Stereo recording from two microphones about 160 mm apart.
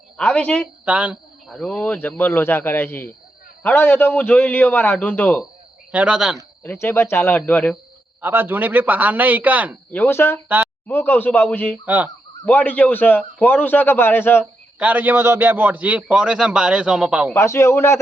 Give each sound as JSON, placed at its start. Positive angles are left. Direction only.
{"t": 0.2, "sound": "a man's voice", "side_deg": 10}
{"t": 0.9, "sound": "a man's voice", "side_deg": -10}
{"t": 1.5, "sound": "a man's voice", "side_deg": 5}
{"t": 5.9, "sound": "speech", "side_deg": -10}
{"t": 6.6, "sound": "a man's voice", "side_deg": 15}
{"t": 8.2, "sound": "a man's voice", "side_deg": -15}
{"t": 9.9, "sound": "a man's voice", "side_deg": 15}
{"t": 11.9, "sound": "a man's voice", "side_deg": -10}
{"t": 12.5, "sound": "a man's voice", "side_deg": 10}
{"t": 14.8, "sound": "a man's voice", "side_deg": -10}
{"t": 17.3, "sound": "a man's voice", "side_deg": 20}